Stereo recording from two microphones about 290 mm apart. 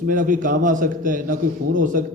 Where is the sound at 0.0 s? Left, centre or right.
Right.